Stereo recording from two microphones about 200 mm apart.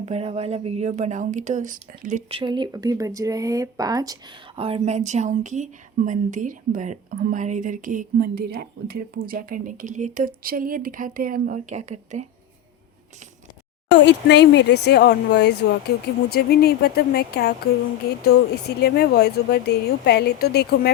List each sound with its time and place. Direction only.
0.0 s speech: 30° right (ahead or behind)
2.4 s speech: 20° right (ahead or behind)
14.0 s speech: 60° left (ahead or behind)